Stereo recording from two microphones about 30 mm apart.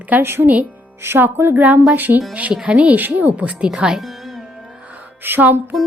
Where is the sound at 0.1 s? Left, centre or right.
Right.